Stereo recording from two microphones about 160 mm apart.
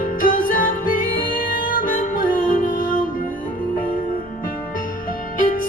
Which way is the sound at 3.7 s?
60° left (ahead or behind).